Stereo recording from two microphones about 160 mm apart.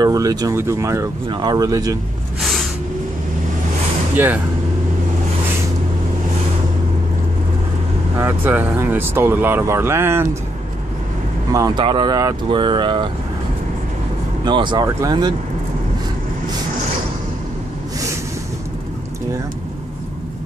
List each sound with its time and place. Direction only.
0.0 s speech: 20° right (ahead or behind)
2.4 s a sound: centre (ahead or behind)
8.2 s speech: 15° right (ahead or behind)
11.5 s speech: 25° right (ahead or behind)
14.4 s speech: 30° right (ahead or behind)